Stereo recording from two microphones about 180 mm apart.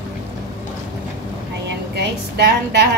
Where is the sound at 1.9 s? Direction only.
70° right (ahead or behind).